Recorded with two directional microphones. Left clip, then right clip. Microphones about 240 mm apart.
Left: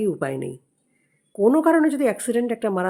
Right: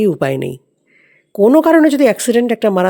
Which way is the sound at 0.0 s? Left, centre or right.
Right.